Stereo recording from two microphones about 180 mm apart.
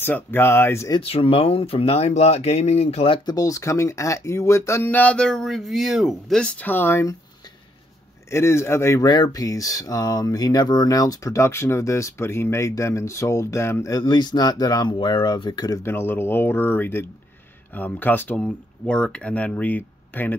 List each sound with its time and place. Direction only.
0.0 s speech: 10° left (ahead or behind)
1.0 s speech: 30° left (ahead or behind); by 7.2 s 15° left (ahead or behind)
8.3 s speech: 15° left (ahead or behind)